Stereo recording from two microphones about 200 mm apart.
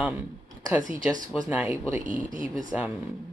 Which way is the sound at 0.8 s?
40° right (ahead or behind).